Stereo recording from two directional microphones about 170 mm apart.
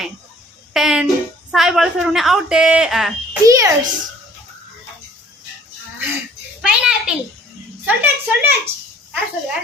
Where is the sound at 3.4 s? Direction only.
20° right (ahead or behind).